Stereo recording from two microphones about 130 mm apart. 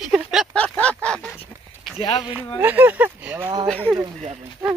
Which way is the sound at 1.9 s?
45° left (ahead or behind).